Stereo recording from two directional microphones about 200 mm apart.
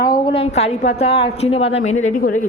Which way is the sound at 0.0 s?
20° left (ahead or behind).